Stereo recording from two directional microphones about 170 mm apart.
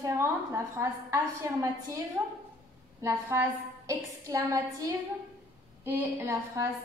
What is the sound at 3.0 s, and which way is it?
A woman's voice, 15° right (ahead or behind).